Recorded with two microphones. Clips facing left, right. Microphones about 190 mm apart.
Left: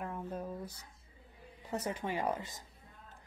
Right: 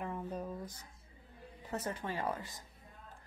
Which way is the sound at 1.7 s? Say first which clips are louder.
Left 2 dB; 15° left (ahead or behind).